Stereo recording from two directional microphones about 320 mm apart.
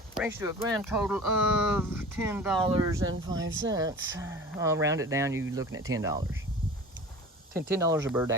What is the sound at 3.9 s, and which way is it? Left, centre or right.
Speech, right.